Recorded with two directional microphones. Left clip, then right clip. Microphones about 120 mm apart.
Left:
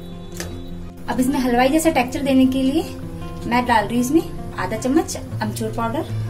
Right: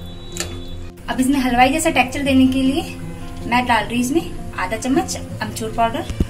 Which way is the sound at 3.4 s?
90° left.